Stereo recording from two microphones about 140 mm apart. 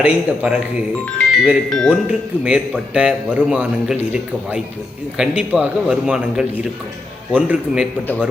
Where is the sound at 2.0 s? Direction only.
10° right (ahead or behind).